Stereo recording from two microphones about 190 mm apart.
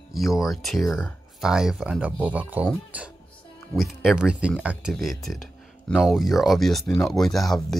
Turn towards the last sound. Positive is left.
turn(degrees=0)  # may be behind; listen again after turning